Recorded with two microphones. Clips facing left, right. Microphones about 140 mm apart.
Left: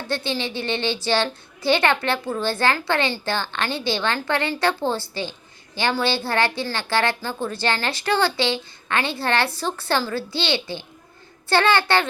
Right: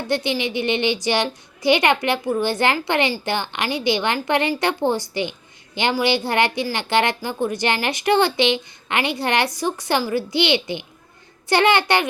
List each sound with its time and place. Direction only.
0.1 s a woman's voice: 15° right (ahead or behind)